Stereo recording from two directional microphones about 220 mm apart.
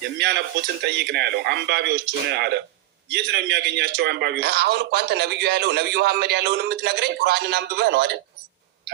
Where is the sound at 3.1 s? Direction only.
50° right (ahead or behind).